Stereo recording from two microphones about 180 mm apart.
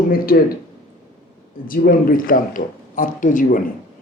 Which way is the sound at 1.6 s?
50° left (ahead or behind).